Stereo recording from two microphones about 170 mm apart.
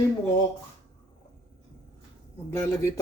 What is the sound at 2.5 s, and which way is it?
Speech, 15° left (ahead or behind).